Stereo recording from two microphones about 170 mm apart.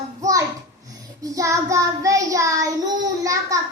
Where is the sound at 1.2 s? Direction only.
20° right (ahead or behind).